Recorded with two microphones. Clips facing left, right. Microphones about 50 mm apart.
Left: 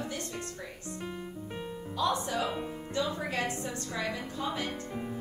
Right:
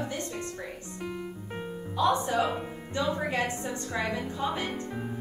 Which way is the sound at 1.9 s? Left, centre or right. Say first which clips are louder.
Right 5 dB; right.